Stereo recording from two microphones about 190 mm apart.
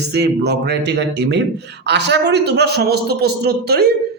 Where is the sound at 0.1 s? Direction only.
60° right (ahead or behind).